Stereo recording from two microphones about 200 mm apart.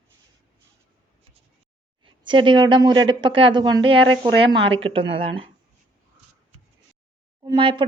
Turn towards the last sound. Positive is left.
turn(degrees=-25)  # may be behind; listen again after turning